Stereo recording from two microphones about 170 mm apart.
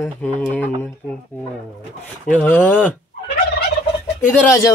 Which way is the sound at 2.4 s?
10° left (ahead or behind).